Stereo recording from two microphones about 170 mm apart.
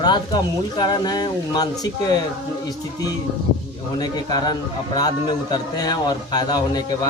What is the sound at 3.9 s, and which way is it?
Speech, 25° left (ahead or behind).